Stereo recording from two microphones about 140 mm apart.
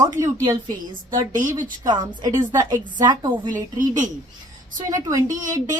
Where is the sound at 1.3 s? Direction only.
65° right (ahead or behind).